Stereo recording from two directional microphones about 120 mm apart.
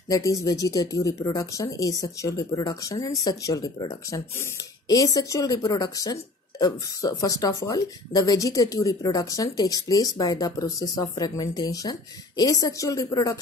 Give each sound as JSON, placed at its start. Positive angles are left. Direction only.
{"t": 0.1, "sound": "speech", "side_deg": 25}